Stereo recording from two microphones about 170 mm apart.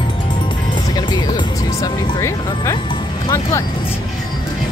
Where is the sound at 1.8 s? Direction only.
20° left (ahead or behind).